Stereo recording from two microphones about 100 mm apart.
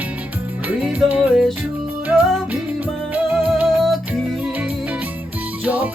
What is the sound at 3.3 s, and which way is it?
Music, 10° right (ahead or behind).